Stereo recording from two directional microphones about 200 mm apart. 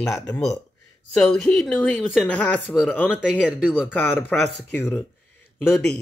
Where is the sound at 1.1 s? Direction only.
5° left (ahead or behind).